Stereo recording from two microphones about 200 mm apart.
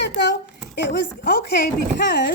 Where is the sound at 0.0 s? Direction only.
60° left (ahead or behind).